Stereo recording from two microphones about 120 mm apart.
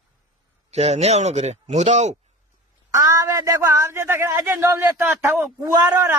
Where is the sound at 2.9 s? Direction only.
25° right (ahead or behind).